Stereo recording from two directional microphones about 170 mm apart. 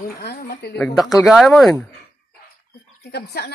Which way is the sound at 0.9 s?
Centre (ahead or behind).